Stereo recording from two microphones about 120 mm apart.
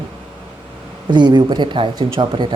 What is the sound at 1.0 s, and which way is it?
Speech, 40° right (ahead or behind).